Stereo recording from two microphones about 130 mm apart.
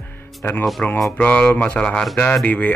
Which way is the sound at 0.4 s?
15° left (ahead or behind).